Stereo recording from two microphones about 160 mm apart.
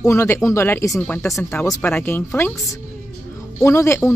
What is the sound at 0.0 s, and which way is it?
Speech, 15° left (ahead or behind).